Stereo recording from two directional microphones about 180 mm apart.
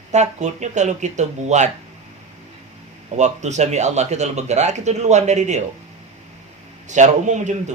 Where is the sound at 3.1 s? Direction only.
40° right (ahead or behind).